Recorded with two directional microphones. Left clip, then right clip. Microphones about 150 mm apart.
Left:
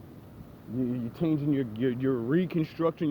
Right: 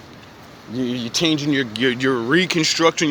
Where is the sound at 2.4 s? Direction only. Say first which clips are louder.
Right 12 dB; 25° right (ahead or behind).